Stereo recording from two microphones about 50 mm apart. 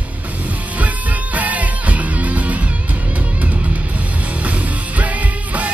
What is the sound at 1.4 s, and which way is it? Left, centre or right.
Music, right.